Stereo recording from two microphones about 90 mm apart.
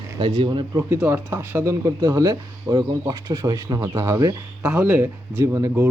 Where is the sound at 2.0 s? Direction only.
45° right (ahead or behind).